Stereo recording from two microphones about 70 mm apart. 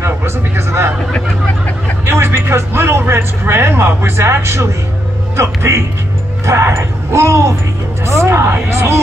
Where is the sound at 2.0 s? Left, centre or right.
Right.